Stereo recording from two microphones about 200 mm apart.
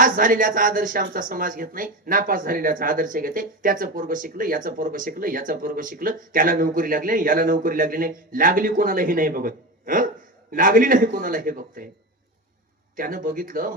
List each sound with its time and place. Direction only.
0.0 s speech: 45° right (ahead or behind)
13.0 s speech: 45° right (ahead or behind)